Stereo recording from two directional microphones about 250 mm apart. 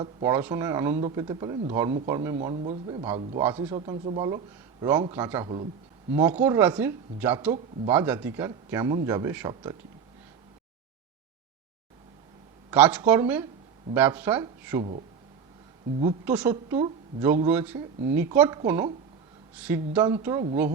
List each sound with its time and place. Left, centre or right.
0.0 s a man's voice: centre
12.7 s a man's voice: centre
16.2 s a man's voice: centre